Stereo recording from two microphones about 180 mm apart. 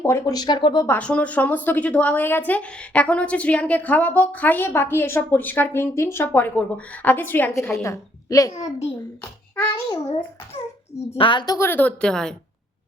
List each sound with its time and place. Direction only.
0.0 s speech: 15° left (ahead or behind)
0.9 s a woman's voice: 5° left (ahead or behind)
8.5 s a child's voice: 40° left (ahead or behind)
9.9 s speech: 30° left (ahead or behind); by 12.3 s 5° left (ahead or behind)